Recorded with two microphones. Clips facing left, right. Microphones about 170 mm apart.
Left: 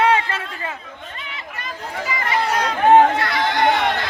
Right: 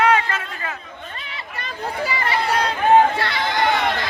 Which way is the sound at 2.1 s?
35° right (ahead or behind).